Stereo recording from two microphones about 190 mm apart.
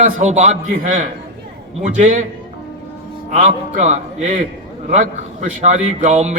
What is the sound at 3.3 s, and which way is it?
A man's voice, 40° right (ahead or behind).